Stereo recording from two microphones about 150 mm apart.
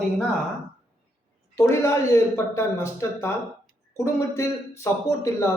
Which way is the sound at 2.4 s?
20° left (ahead or behind).